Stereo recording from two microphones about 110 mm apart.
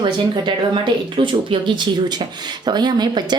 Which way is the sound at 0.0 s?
45° right (ahead or behind).